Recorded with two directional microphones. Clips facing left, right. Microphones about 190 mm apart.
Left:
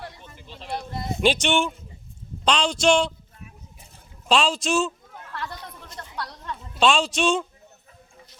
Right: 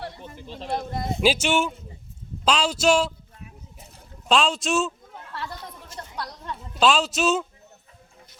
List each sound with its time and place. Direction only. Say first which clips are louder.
0.0 s speech: right 4 dB; 35° right (ahead or behind)
1.2 s speech: even; 5° right (ahead or behind)
4.3 s speech: even; centre (ahead or behind)
5.1 s chatter: even; 25° right (ahead or behind)
6.7 s speech: even; centre (ahead or behind)